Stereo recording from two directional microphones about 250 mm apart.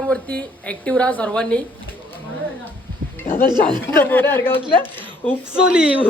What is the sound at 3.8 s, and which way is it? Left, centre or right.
Speech, centre.